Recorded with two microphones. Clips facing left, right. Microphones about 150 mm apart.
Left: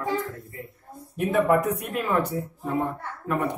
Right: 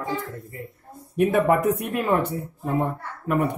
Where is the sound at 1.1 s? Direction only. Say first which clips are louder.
Right 2 dB; 70° right (ahead or behind).